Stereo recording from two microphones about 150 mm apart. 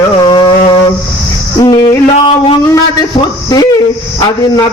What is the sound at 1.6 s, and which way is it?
Speech, 25° left (ahead or behind).